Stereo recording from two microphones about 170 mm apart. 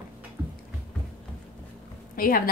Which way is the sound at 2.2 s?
55° left (ahead or behind).